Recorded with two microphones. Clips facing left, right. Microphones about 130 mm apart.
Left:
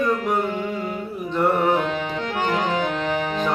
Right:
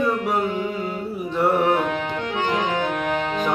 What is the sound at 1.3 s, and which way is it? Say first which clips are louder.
Music: even; centre (ahead or behind).